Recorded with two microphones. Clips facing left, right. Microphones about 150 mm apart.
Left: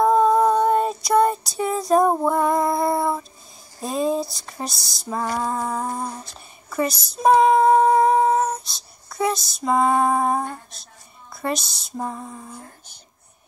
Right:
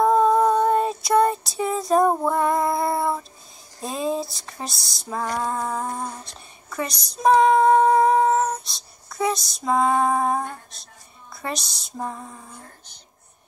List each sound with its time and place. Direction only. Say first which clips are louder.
0.0 s child singing: left 1 dB; centre (ahead or behind)
3.8 s female singing: left 3 dB; centre (ahead or behind)
11.4 s speech: left 5 dB; centre (ahead or behind)